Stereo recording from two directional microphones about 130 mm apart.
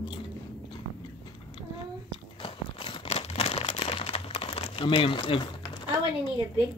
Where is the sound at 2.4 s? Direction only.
40° left (ahead or behind).